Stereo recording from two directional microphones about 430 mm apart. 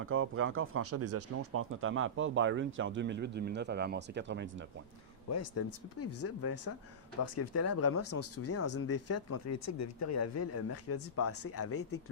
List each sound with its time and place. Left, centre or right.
0.0 s speech: right
5.3 s speech: left